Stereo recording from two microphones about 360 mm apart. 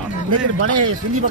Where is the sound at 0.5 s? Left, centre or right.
Right.